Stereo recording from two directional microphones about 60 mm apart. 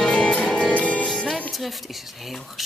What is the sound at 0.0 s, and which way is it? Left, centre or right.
Music, centre.